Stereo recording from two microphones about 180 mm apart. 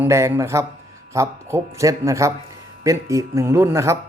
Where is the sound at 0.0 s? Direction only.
15° right (ahead or behind).